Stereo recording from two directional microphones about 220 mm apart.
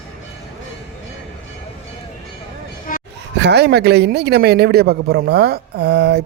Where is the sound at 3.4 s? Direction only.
50° right (ahead or behind).